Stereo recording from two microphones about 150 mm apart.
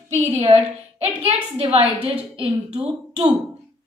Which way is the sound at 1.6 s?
40° right (ahead or behind).